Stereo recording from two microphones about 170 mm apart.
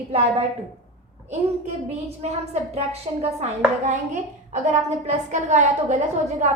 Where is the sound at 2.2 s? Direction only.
40° right (ahead or behind).